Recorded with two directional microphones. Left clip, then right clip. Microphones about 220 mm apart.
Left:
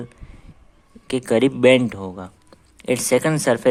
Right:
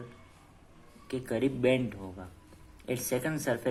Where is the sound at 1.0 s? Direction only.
50° left (ahead or behind).